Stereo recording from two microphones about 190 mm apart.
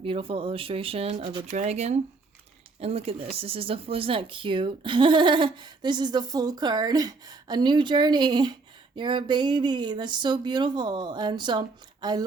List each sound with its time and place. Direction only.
0.0 s speech: 30° right (ahead or behind)
1.5 s speech: 35° right (ahead or behind); by 12.2 s 20° right (ahead or behind)